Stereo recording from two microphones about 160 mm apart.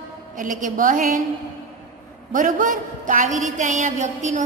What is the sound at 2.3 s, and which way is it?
A woman's voice, 55° right (ahead or behind).